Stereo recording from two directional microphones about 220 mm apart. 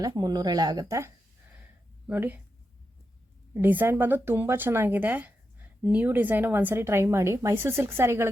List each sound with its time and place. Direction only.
0.0 s speech: 15° right (ahead or behind)
3.5 s speech: 10° right (ahead or behind)